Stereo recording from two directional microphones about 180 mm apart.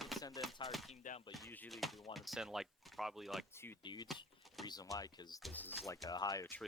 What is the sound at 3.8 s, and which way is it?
Speech, 25° left (ahead or behind).